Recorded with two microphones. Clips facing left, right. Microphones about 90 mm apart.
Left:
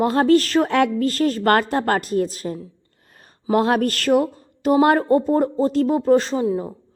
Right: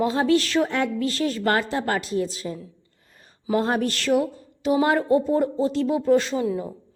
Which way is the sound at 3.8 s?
50° left (ahead or behind).